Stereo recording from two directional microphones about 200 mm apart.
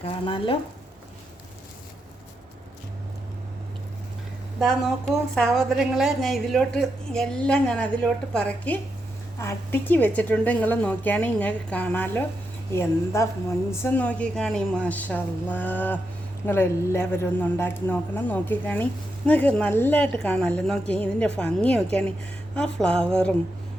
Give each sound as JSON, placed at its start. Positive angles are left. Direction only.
{"t": 0.0, "sound": "speech", "side_deg": 25}
{"t": 4.6, "sound": "a woman's voice", "side_deg": 0}